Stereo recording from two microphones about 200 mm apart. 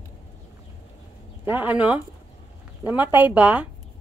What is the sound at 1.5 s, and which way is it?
Speech, 10° right (ahead or behind).